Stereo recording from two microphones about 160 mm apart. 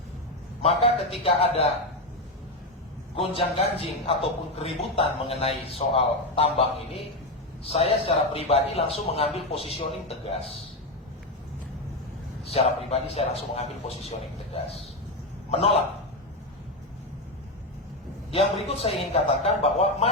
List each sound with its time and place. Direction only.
0.6 s a man's voice: 40° left (ahead or behind)
3.2 s a man's voice: 35° left (ahead or behind)
12.5 s a man's voice: 40° left (ahead or behind)
15.4 s a man's voice: 40° left (ahead or behind)
18.3 s a man's voice: 40° left (ahead or behind)